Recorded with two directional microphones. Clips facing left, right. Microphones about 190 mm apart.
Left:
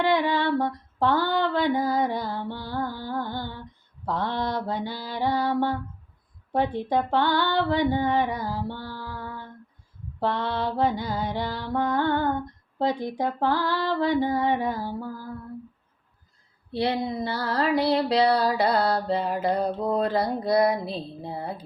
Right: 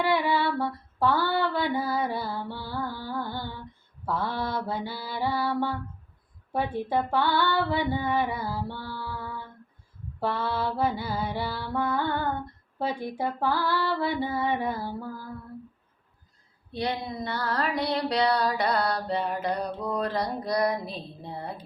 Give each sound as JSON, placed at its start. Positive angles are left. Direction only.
{"t": 0.0, "sound": "female singing", "side_deg": 15}
{"t": 3.2, "sound": "music", "side_deg": 15}
{"t": 7.2, "sound": "music", "side_deg": 15}
{"t": 16.7, "sound": "music", "side_deg": 25}